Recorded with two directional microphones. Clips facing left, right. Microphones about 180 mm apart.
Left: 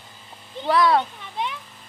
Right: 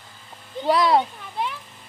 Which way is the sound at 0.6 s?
20° right (ahead or behind).